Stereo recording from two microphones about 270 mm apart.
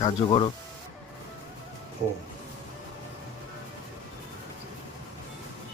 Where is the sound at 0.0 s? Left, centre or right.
Centre.